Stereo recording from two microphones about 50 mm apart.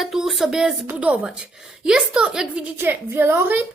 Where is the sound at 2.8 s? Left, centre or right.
Right.